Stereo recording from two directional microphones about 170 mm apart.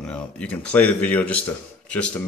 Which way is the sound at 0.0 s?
5° left (ahead or behind).